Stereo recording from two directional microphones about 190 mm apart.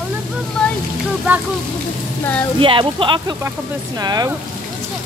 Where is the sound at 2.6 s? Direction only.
25° right (ahead or behind).